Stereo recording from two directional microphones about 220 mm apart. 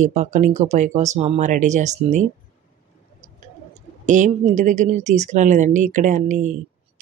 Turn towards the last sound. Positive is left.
turn(degrees=-35)  # may be behind; listen again after turning